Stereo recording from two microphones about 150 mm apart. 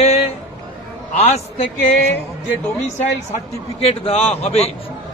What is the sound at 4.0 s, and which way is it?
Speech, 40° left (ahead or behind).